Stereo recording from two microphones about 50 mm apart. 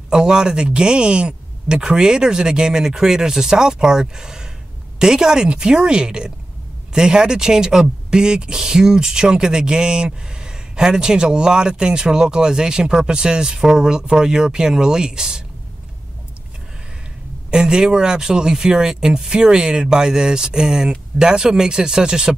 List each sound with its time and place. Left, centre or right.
0.1 s speech: centre
17.5 s speech: centre